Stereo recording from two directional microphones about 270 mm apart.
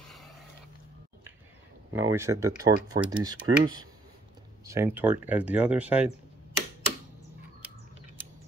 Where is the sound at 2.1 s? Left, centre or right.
Centre.